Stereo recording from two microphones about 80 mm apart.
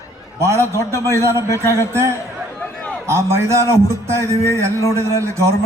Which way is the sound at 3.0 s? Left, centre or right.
Right.